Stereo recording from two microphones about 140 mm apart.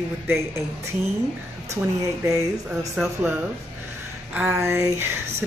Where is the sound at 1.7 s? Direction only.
25° right (ahead or behind).